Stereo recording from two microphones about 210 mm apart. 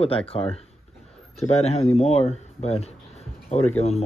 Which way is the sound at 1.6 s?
30° left (ahead or behind).